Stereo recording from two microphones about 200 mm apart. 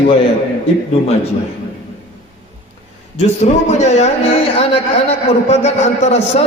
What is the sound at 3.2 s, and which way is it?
Speech, 35° left (ahead or behind).